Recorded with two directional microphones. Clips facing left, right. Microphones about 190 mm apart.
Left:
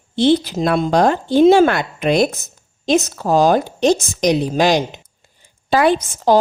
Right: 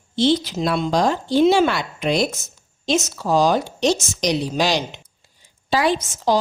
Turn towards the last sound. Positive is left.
turn(degrees=55)  # may be behind; listen again after turning